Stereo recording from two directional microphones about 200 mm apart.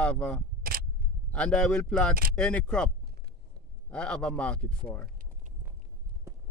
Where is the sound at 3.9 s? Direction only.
5° left (ahead or behind).